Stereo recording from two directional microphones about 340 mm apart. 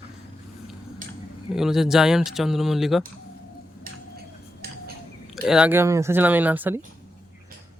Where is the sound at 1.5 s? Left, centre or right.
Centre.